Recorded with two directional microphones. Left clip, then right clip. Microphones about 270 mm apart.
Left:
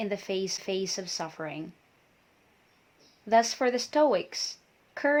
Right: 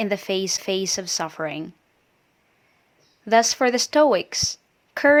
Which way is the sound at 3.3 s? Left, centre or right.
Right.